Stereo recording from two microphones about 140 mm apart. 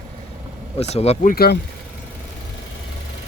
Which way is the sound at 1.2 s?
70° left (ahead or behind).